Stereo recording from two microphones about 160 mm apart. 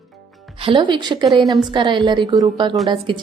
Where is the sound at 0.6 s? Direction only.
30° right (ahead or behind).